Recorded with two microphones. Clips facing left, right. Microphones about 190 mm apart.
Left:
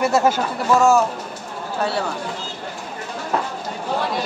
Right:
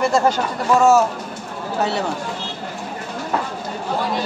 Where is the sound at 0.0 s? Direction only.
5° left (ahead or behind).